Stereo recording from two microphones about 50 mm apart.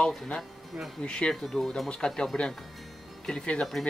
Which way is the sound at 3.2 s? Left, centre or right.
Centre.